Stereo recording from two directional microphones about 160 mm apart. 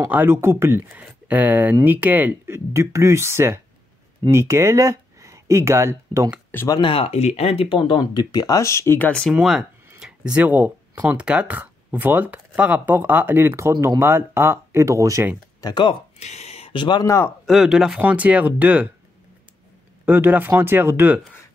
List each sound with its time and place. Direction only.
0.1 s speech: 10° right (ahead or behind)
6.5 s speech: 15° left (ahead or behind)
6.8 s speech: 35° left (ahead or behind); by 9.3 s 10° left (ahead or behind)
9.3 s speech: centre (ahead or behind); by 15.3 s 20° right (ahead or behind)
15.6 s speech: 30° left (ahead or behind)
16.2 s speech: 45° left (ahead or behind); by 17.3 s 20° left (ahead or behind)
17.5 s speech: centre (ahead or behind)
20.1 s speech: 10° right (ahead or behind)